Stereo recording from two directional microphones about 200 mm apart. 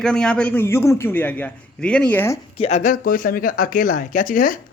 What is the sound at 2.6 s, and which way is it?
Speech, 30° left (ahead or behind).